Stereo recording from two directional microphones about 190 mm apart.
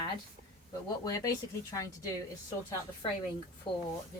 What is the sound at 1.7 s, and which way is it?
Speech, 20° left (ahead or behind).